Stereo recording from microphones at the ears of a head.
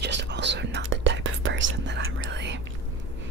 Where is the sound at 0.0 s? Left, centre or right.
Right.